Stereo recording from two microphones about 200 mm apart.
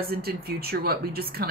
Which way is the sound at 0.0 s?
50° right (ahead or behind).